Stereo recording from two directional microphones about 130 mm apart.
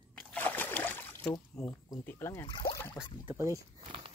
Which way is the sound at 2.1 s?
20° left (ahead or behind).